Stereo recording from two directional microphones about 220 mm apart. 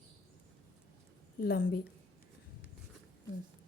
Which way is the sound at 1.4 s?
40° left (ahead or behind).